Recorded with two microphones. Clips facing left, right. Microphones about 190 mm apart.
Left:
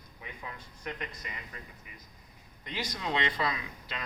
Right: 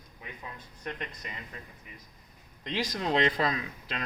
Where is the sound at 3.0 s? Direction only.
40° right (ahead or behind).